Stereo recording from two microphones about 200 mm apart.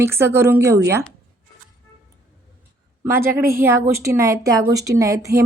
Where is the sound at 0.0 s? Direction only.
10° right (ahead or behind).